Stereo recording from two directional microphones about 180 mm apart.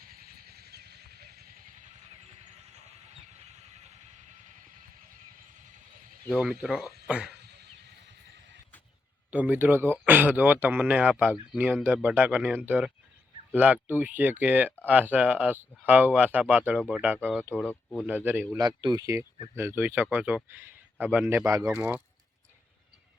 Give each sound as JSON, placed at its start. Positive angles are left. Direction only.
{"t": 0.0, "sound": "vehicle", "side_deg": -55}
{"t": 5.5, "sound": "a sound", "side_deg": -45}
{"t": 6.2, "sound": "speech", "side_deg": -5}
{"t": 7.3, "sound": "a sound", "side_deg": -65}
{"t": 9.3, "sound": "speech", "side_deg": -10}
{"t": 17.5, "sound": "speech", "side_deg": 5}
{"t": 18.1, "sound": "speech", "side_deg": -10}
{"t": 18.6, "sound": "speech", "side_deg": -25}